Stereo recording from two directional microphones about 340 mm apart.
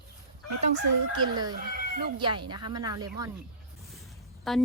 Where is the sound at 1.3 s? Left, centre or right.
Centre.